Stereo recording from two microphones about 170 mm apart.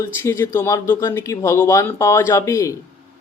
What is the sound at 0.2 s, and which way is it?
Speech, 15° left (ahead or behind).